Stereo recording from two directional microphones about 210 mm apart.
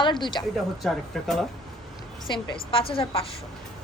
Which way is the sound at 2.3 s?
25° left (ahead or behind).